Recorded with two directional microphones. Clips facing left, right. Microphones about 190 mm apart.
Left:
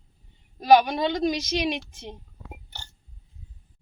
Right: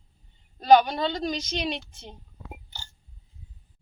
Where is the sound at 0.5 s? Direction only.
10° left (ahead or behind).